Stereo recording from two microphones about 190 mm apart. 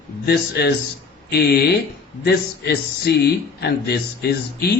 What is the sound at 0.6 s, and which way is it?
Speech, 60° left (ahead or behind).